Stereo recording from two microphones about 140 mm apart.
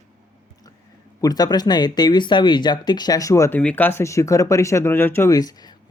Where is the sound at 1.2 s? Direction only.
30° left (ahead or behind).